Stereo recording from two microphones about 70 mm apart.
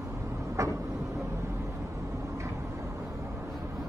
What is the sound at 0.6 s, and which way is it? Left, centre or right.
Vehicle, right.